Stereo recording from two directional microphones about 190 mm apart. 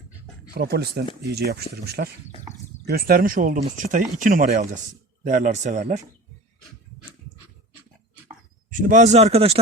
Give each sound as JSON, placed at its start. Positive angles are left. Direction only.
{"t": 0.5, "sound": "speech", "side_deg": -55}
{"t": 8.7, "sound": "speech", "side_deg": -40}